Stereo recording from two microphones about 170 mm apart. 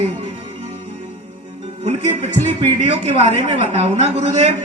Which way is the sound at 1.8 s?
40° right (ahead or behind).